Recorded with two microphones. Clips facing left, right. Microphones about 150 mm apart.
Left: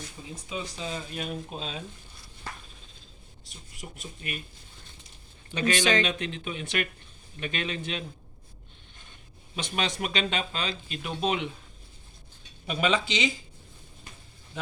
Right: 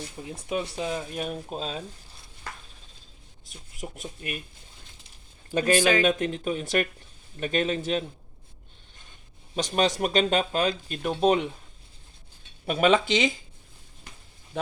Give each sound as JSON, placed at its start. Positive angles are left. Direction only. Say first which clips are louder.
{"t": 0.3, "sound": "speech", "louder": "right 6 dB", "side_deg": -65}
{"t": 1.5, "sound": "speech", "louder": "right 4 dB", "side_deg": -40}
{"t": 3.9, "sound": "speech", "louder": "right 1 dB", "side_deg": 0}
{"t": 5.8, "sound": "speech", "louder": "even", "side_deg": -5}
{"t": 6.1, "sound": "speech", "louder": "right 7 dB", "side_deg": -45}
{"t": 9.6, "sound": "speech", "louder": "right 6 dB", "side_deg": -40}
{"t": 12.6, "sound": "speech", "louder": "right 5 dB", "side_deg": -50}